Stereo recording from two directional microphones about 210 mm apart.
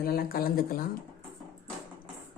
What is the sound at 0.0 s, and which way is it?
Speech, 45° left (ahead or behind).